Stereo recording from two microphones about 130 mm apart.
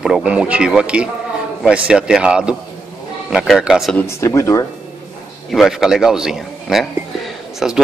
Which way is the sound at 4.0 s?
20° left (ahead or behind).